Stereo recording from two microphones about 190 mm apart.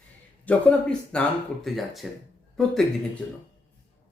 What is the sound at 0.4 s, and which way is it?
Speech, 5° left (ahead or behind).